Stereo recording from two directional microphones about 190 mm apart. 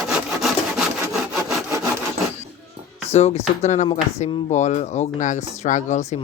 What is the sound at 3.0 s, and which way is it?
Speech, 35° left (ahead or behind).